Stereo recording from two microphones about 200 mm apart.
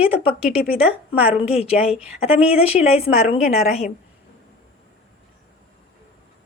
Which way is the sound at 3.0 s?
30° left (ahead or behind).